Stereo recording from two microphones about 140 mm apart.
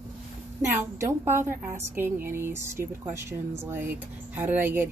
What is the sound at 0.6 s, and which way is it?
A woman's voice, 15° right (ahead or behind).